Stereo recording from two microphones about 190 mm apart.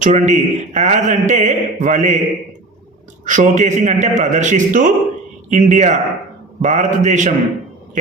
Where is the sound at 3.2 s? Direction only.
40° right (ahead or behind).